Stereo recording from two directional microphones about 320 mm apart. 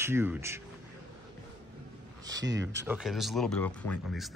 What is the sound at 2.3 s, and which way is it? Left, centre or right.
Speech, right.